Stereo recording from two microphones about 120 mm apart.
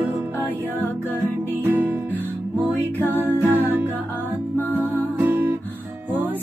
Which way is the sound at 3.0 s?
15° right (ahead or behind).